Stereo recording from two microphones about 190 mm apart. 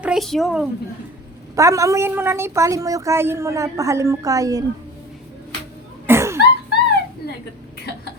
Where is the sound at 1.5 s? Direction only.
15° right (ahead or behind).